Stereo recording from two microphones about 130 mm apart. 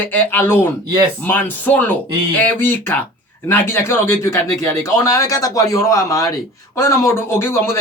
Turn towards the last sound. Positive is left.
turn(degrees=20)  # may be behind; listen again after turning